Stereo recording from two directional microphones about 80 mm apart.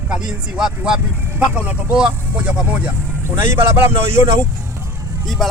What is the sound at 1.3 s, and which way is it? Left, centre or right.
Speech, right.